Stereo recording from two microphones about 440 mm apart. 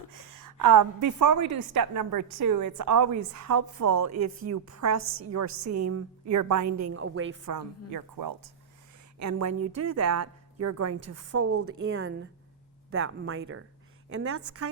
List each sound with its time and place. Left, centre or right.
0.1 s a woman's voice: right
7.4 s a woman's voice: right
9.1 s a woman's voice: right